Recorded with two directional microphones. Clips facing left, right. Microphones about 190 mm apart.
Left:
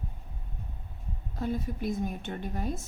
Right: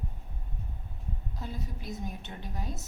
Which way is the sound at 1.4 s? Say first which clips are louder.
Left 10 dB; 55° left (ahead or behind).